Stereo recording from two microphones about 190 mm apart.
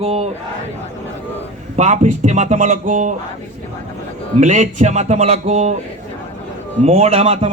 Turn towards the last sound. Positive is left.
turn(degrees=-30)  # may be behind; listen again after turning